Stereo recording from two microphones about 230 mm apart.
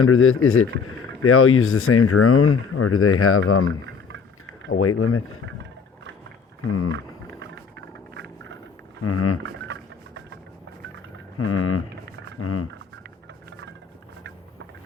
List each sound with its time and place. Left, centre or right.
0.0 s speech: left
4.7 s speech: left
8.1 s vehicle: right
9.0 s speech: left
9.4 s a sound: right
11.3 s speech: left